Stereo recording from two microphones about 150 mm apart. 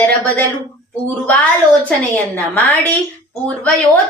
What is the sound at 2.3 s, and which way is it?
Speech, 10° left (ahead or behind).